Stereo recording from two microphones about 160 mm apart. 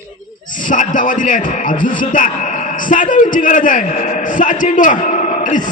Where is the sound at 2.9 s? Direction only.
55° left (ahead or behind).